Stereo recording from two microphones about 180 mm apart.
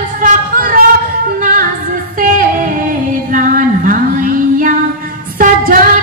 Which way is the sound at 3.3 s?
50° right (ahead or behind).